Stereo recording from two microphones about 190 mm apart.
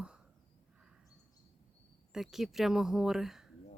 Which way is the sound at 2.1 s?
Centre (ahead or behind).